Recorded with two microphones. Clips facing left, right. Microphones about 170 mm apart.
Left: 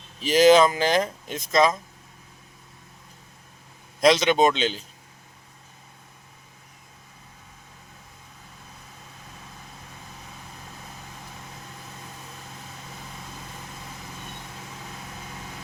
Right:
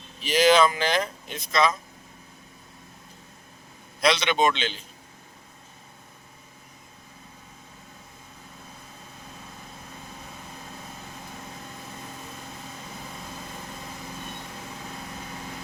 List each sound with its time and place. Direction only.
0.2 s speech: 45° left (ahead or behind)
4.0 s a man's voice: 40° left (ahead or behind)